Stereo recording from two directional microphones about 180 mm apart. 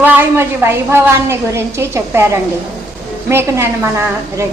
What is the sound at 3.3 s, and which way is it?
A woman's voice, 15° right (ahead or behind).